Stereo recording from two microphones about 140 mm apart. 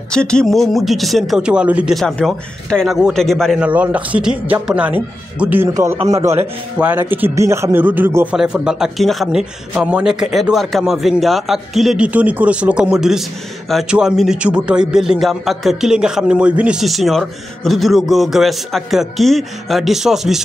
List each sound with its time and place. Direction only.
0.1 s a man's voice: 5° left (ahead or behind)
3.6 s a man's voice: 10° right (ahead or behind)
8.4 s a man's voice: 5° right (ahead or behind)